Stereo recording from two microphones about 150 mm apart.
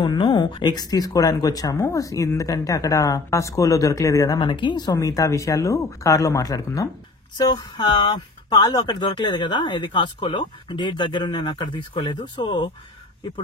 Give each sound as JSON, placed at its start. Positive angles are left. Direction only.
{"t": 0.0, "sound": "speech", "side_deg": 30}